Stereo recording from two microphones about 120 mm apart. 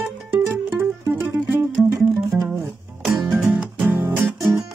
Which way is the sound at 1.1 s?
15° right (ahead or behind).